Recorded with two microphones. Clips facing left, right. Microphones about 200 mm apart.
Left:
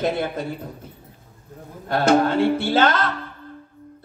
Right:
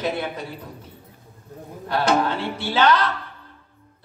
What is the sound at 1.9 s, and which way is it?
A man's voice, 45° left (ahead or behind).